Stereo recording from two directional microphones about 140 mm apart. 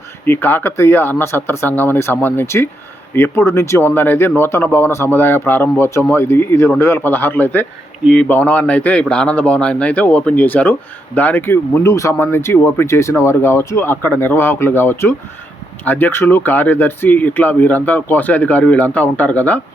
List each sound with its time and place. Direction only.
0.3 s speech: 15° left (ahead or behind)